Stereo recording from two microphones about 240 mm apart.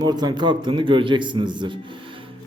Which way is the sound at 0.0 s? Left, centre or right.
Centre.